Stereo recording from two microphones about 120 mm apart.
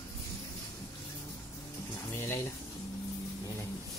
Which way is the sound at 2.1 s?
20° left (ahead or behind).